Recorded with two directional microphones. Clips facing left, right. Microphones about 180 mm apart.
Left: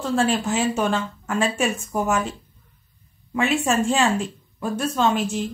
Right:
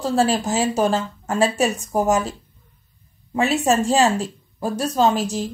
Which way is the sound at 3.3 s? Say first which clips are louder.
Right 2 dB; 35° right (ahead or behind).